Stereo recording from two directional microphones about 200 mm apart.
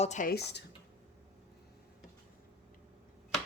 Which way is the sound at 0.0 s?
40° left (ahead or behind).